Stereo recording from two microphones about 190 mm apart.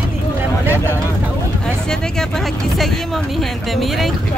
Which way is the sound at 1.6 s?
5° left (ahead or behind).